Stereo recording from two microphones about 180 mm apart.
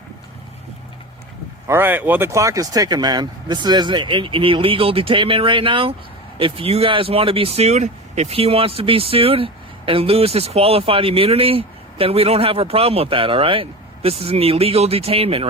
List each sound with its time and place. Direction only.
1.6 s speech: 10° right (ahead or behind); by 15.4 s 30° right (ahead or behind)